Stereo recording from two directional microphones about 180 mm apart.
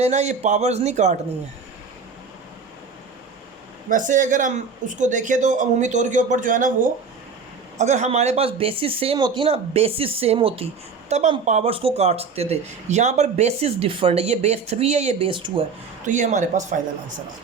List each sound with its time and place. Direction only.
0.0 s speech: 40° right (ahead or behind)
3.8 s speech: 45° right (ahead or behind); by 15.6 s 25° right (ahead or behind)
16.0 s speech: 45° right (ahead or behind)